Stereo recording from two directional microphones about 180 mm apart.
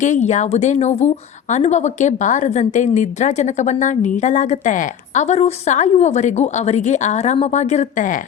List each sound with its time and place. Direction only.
0.0 s a woman's voice: 40° left (ahead or behind)